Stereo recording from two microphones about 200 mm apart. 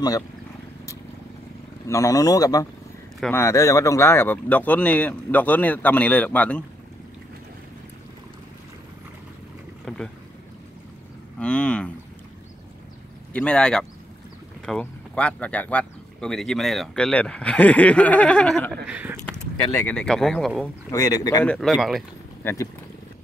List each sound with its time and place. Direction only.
1.9 s speech: 15° left (ahead or behind)
9.8 s speech: 5° left (ahead or behind)
11.3 s speech: 5° left (ahead or behind)
13.3 s speech: 5° left (ahead or behind)
18.9 s speech: 10° right (ahead or behind)
19.2 s speech: 5° left (ahead or behind)
20.9 s speech: 15° left (ahead or behind)
21.5 s speech: centre (ahead or behind)
22.4 s speech: 10° left (ahead or behind)